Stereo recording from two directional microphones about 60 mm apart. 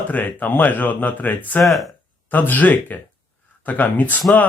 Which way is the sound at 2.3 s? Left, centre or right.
Left.